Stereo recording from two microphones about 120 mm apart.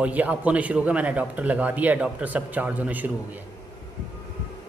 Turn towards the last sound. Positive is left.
turn(degrees=-15)  # may be behind; listen again after turning